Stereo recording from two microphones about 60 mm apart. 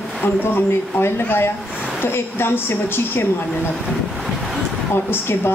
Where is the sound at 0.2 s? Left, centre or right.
Left.